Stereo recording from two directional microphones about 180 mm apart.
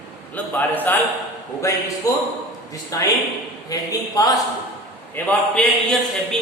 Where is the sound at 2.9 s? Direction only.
20° left (ahead or behind).